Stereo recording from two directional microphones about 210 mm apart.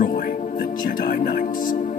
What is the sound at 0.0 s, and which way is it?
Music, 40° left (ahead or behind).